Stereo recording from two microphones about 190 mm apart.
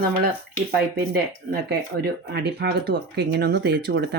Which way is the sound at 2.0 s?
60° right (ahead or behind).